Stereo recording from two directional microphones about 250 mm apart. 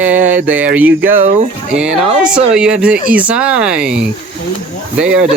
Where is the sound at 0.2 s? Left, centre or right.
Right.